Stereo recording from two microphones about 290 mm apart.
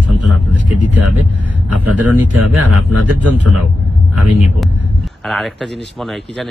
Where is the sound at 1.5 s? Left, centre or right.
Right.